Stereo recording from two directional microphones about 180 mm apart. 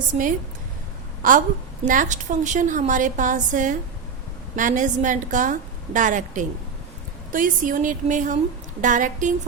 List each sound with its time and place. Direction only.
0.1 s a woman's voice: 45° right (ahead or behind)
1.8 s a woman's voice: 45° right (ahead or behind)